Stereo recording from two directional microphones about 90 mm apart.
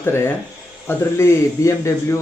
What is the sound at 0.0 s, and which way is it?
Speech, 25° left (ahead or behind).